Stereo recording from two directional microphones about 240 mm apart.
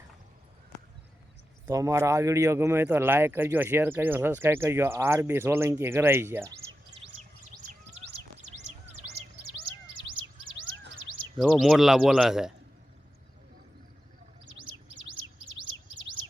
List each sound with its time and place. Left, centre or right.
1.6 s speech: centre
7.0 s bird: right
11.3 s speech: centre
15.4 s bird: right